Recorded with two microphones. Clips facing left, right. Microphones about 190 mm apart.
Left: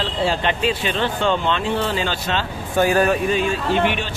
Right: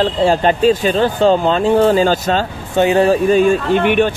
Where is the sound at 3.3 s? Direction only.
50° right (ahead or behind).